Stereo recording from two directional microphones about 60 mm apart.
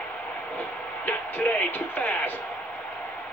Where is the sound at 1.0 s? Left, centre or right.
Left.